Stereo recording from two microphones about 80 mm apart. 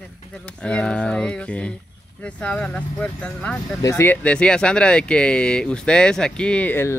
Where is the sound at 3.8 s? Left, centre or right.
Left.